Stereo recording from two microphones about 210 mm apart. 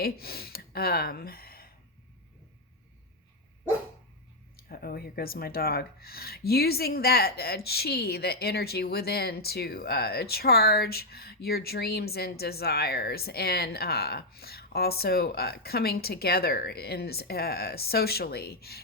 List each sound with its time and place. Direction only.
0.0 s speech: 45° left (ahead or behind)
4.5 s speech: 45° left (ahead or behind)